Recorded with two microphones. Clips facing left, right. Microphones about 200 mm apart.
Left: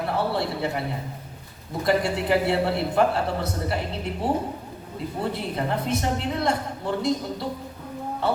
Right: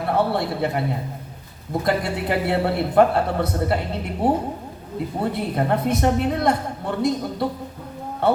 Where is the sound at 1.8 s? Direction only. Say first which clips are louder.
Left 1 dB; 55° right (ahead or behind).